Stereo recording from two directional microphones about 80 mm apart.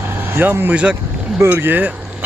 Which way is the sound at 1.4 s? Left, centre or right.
Right.